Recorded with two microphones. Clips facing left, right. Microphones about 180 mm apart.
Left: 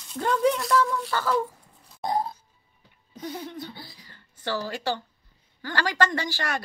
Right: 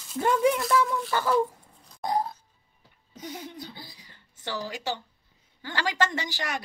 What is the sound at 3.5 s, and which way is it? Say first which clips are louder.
A woman's voice: left 3 dB; 15° right (ahead or behind).